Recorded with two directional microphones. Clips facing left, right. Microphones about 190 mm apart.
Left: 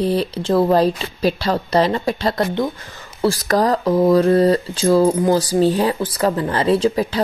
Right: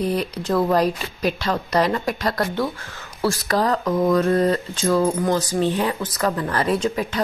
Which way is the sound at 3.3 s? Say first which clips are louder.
Left 3 dB; 40° left (ahead or behind).